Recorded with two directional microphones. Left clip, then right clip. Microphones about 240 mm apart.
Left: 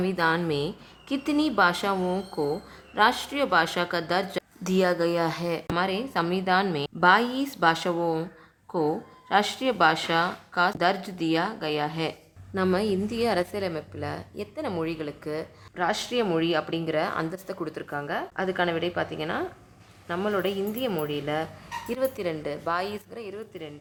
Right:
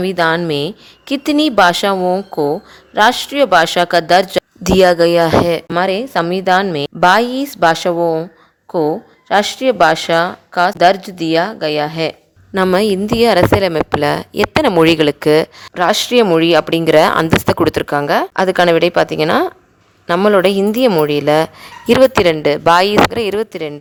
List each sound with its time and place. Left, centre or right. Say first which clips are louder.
0.0 s a woman's voice: right 11 dB; right